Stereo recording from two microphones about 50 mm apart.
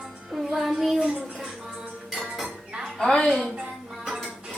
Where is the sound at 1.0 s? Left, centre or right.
Centre.